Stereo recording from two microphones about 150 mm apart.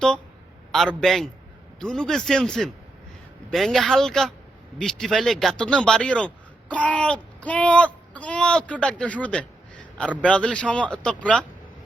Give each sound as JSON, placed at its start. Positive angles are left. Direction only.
{"t": 0.7, "sound": "speech", "side_deg": 0}